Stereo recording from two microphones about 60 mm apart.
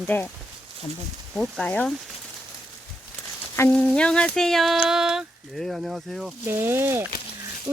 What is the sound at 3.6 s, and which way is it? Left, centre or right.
Speech, left.